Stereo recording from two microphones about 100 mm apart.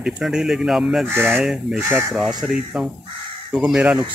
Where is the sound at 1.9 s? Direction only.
25° right (ahead or behind).